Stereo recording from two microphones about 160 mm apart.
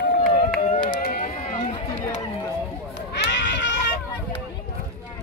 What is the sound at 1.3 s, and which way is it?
Run, 45° left (ahead or behind).